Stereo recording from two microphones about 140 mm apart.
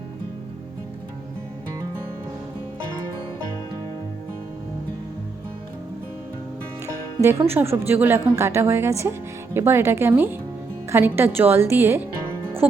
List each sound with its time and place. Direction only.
6.8 s a woman's voice: 20° right (ahead or behind)